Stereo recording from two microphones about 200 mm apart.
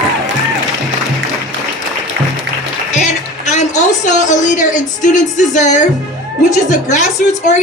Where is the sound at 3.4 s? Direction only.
35° left (ahead or behind).